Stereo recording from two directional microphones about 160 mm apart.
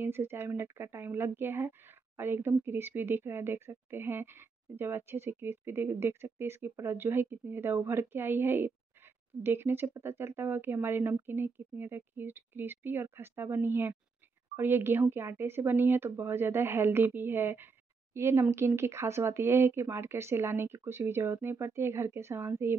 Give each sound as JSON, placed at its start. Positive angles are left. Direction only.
{"t": 0.0, "sound": "speech", "side_deg": -15}